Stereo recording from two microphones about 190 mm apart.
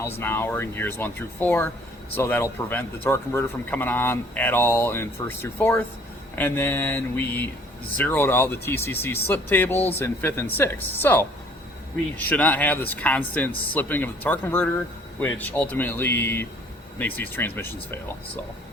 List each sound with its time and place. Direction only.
0.2 s speech: 10° left (ahead or behind)